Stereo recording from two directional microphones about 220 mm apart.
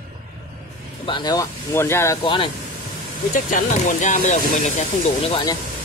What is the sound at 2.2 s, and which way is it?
Speech, 20° left (ahead or behind).